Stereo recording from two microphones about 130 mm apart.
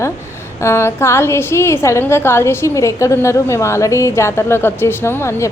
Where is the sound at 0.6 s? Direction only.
20° left (ahead or behind).